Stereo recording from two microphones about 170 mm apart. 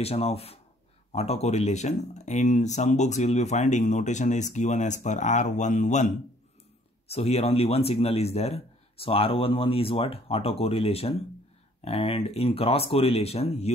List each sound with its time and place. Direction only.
0.0 s a man's voice: 35° left (ahead or behind)
7.1 s a man's voice: 40° left (ahead or behind)